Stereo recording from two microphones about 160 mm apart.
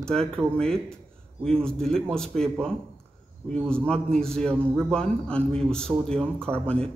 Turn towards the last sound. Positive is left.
turn(degrees=5)  # may be behind; listen again after turning